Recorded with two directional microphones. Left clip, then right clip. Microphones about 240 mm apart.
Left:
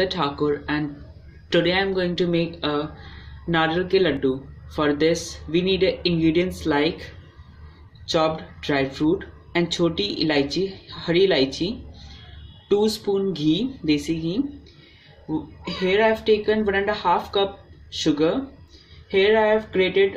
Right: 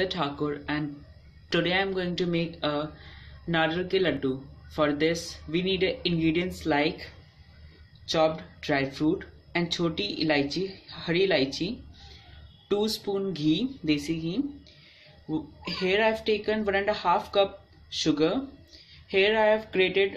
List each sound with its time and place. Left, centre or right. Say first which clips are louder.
0.0 s speech: left 6 dB; centre
8.1 s speech: left 3 dB; centre
15.8 s speech: left 5 dB; centre